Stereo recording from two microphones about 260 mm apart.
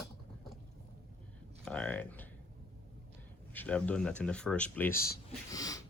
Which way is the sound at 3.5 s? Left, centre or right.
Centre.